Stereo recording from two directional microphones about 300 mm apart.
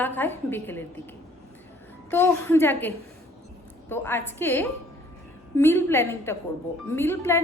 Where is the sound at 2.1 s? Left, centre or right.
Centre.